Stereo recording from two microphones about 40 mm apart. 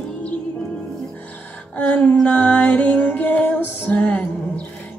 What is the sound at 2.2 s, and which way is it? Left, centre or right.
Music, left.